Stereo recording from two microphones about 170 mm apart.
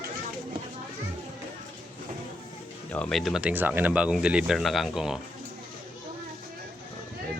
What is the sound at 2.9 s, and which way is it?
Speech, 5° left (ahead or behind).